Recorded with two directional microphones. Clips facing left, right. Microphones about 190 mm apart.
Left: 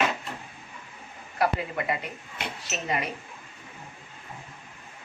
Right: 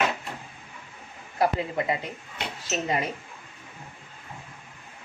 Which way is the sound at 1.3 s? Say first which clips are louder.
Right 2 dB; 25° right (ahead or behind).